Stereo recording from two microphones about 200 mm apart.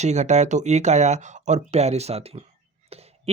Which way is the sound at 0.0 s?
35° right (ahead or behind).